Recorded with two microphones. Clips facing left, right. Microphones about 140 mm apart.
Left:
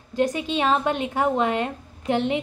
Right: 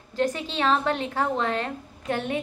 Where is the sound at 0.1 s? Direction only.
15° left (ahead or behind).